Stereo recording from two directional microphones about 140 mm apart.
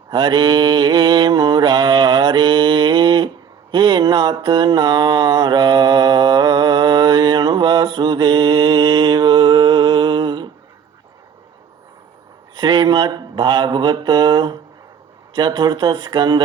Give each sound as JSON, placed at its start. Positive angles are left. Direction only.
{"t": 0.1, "sound": "mantra", "side_deg": -30}
{"t": 12.5, "sound": "mantra", "side_deg": -30}